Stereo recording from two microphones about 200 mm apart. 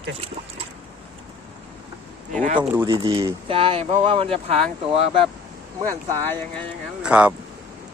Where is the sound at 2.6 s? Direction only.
10° right (ahead or behind).